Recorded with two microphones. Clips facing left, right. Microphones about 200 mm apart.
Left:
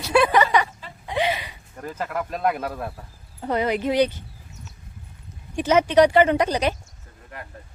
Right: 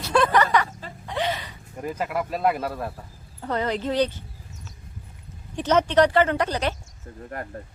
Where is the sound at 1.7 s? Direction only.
10° right (ahead or behind).